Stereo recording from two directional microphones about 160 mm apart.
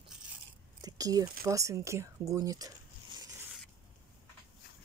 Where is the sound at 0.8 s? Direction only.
20° right (ahead or behind).